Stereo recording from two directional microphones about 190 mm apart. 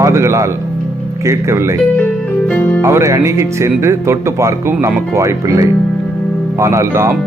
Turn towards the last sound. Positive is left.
turn(degrees=-15)  # may be behind; listen again after turning